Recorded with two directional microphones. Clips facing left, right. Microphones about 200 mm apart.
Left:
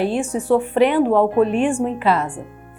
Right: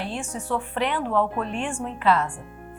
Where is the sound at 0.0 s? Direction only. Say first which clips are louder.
Left 11 dB; 10° left (ahead or behind).